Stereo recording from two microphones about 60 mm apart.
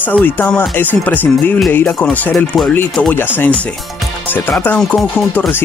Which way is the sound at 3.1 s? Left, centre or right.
Left.